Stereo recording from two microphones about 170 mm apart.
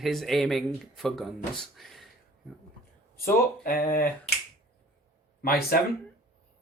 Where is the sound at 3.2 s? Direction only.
60° left (ahead or behind).